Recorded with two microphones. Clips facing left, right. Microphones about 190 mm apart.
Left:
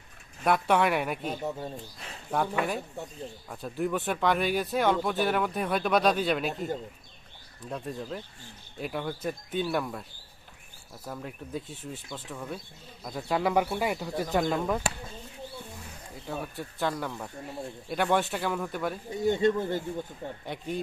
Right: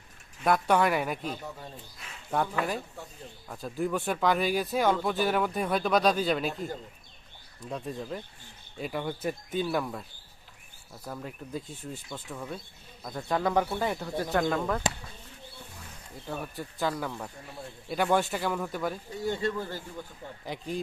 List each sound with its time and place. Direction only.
0.4 s speech: centre (ahead or behind)
1.5 s speech: 35° left (ahead or behind)
2.3 s speech: centre (ahead or behind)
7.7 s speech: centre (ahead or behind)
14.5 s speech: 15° left (ahead or behind)
16.3 s speech: centre (ahead or behind)
19.1 s speech: 20° left (ahead or behind)
20.4 s speech: centre (ahead or behind)